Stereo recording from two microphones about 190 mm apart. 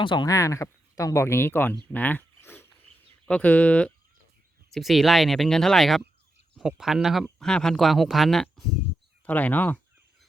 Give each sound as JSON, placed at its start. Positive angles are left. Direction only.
{"t": 0.0, "sound": "speech", "side_deg": 25}
{"t": 1.7, "sound": "a sound", "side_deg": 10}
{"t": 4.7, "sound": "speech", "side_deg": 0}